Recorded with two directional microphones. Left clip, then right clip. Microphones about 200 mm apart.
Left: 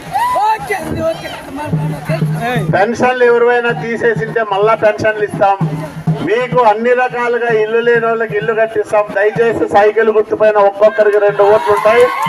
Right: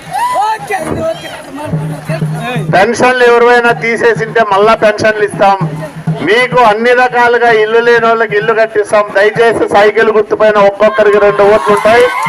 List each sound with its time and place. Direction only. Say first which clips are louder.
0.2 s a sound: right 1 dB; 35° right (ahead or behind)
2.7 s a man's voice: right 5 dB; 15° right (ahead or behind)
10.6 s a man's voice: right 2 dB; 35° right (ahead or behind)
11.0 s a man's voice: right 4 dB; 15° right (ahead or behind)